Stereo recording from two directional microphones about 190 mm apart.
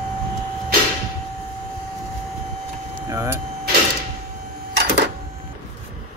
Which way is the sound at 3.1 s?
15° right (ahead or behind).